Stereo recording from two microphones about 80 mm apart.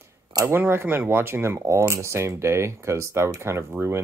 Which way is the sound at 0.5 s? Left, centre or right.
Right.